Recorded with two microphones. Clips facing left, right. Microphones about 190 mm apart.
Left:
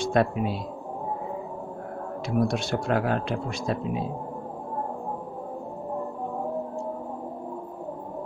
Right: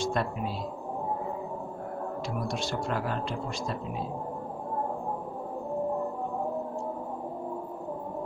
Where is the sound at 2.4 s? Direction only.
65° left (ahead or behind).